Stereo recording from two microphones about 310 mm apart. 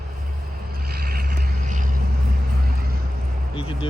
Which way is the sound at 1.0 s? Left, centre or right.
Right.